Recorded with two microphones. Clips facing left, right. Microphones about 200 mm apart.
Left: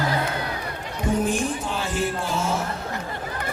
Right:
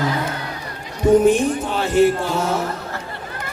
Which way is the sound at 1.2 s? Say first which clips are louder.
Right 9 dB; 65° right (ahead or behind).